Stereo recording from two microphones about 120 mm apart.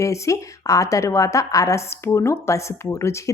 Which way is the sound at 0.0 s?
25° left (ahead or behind).